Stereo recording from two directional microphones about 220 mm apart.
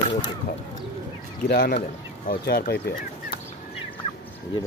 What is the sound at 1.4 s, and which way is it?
Speech, 45° left (ahead or behind).